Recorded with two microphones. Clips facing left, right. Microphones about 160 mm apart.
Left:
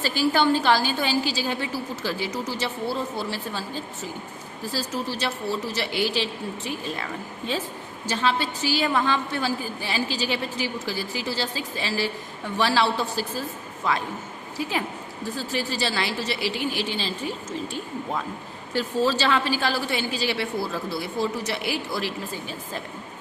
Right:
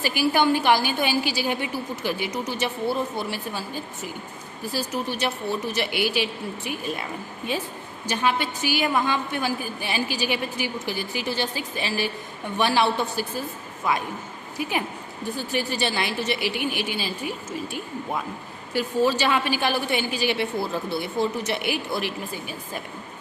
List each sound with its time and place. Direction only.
0.0 s a woman's voice: 15° right (ahead or behind)
18.7 s a woman's voice: 15° right (ahead or behind)